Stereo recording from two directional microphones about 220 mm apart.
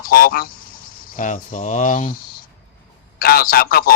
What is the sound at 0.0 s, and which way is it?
Speech, 40° left (ahead or behind).